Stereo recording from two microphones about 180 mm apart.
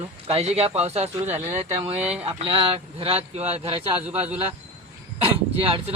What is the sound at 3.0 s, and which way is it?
Speech, 35° right (ahead or behind).